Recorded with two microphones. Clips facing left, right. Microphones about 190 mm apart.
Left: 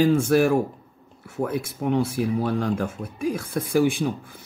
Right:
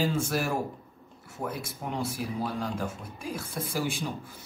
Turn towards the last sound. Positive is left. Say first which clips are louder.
# left 10 dB
turn(degrees=55)  # may be behind; listen again after turning